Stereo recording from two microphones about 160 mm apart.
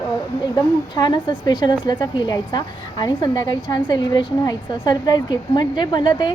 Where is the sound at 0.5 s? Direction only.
25° left (ahead or behind).